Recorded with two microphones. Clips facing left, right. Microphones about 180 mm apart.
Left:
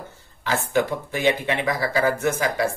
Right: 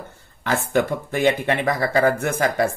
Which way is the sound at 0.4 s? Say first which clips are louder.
Right 2 dB; 55° right (ahead or behind).